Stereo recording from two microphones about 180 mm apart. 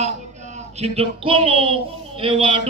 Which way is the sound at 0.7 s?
35° right (ahead or behind).